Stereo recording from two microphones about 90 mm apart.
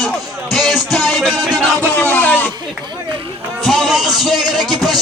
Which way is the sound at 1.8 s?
15° left (ahead or behind).